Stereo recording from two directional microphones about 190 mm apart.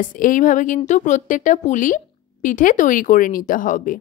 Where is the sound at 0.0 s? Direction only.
45° left (ahead or behind).